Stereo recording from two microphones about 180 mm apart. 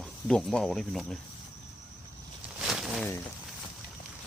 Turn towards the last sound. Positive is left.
turn(degrees=0)  # may be behind; listen again after turning